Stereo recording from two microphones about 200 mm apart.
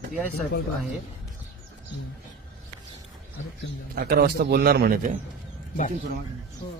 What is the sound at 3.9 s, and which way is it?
A man's voice, 50° right (ahead or behind).